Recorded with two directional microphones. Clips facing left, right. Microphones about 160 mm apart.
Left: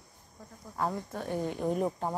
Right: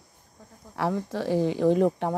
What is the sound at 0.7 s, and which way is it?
Speech, 85° right.